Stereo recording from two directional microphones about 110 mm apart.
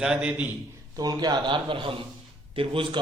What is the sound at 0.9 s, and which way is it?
A man's voice, 35° right (ahead or behind).